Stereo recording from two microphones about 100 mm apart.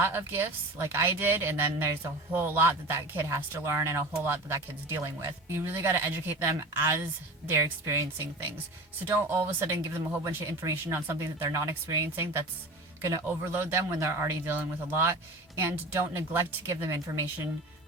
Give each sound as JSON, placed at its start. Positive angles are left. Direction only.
{"t": 0.0, "sound": "speech", "side_deg": -25}
{"t": 13.0, "sound": "a man's voice", "side_deg": -35}
{"t": 13.2, "sound": "speech", "side_deg": -25}